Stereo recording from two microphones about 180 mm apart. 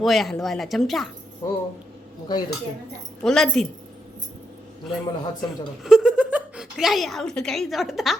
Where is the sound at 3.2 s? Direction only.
Centre (ahead or behind).